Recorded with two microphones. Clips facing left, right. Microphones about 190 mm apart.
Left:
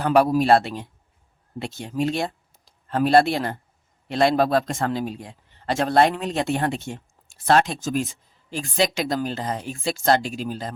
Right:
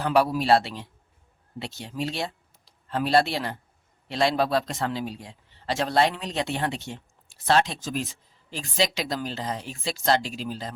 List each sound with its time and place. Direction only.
0.0 s a man's voice: 50° left (ahead or behind)